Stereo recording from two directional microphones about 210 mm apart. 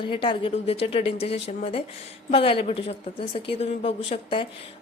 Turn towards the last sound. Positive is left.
turn(degrees=25)  # may be behind; listen again after turning